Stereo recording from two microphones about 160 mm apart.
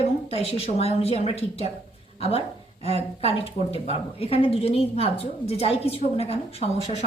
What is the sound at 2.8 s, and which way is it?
A woman's voice, 40° left (ahead or behind).